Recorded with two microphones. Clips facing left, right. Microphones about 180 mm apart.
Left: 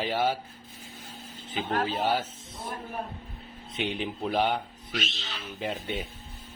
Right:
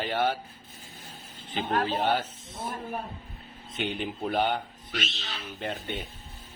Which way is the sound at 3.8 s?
Centre (ahead or behind).